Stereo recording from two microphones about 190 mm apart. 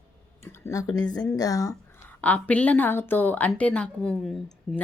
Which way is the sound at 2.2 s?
5° left (ahead or behind).